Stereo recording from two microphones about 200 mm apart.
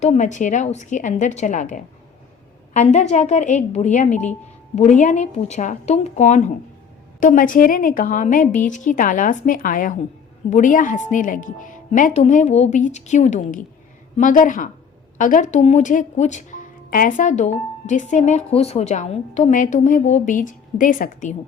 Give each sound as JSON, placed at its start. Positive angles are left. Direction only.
{"t": 0.0, "sound": "speech", "side_deg": 35}